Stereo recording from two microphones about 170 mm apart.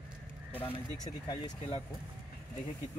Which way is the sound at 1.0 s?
25° left (ahead or behind).